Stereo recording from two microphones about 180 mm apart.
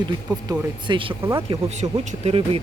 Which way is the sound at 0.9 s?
25° right (ahead or behind).